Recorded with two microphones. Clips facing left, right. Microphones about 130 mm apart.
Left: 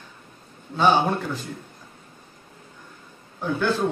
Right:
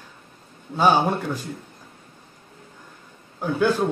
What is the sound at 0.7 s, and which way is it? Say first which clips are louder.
Speech: right 1 dB; 10° right (ahead or behind).